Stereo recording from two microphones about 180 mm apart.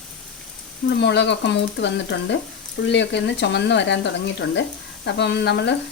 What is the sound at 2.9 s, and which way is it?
Speech, 75° left (ahead or behind).